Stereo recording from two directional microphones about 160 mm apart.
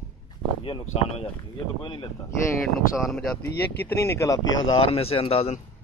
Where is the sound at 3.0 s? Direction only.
Centre (ahead or behind).